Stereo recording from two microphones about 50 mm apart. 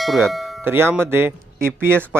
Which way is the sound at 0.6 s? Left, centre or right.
Right.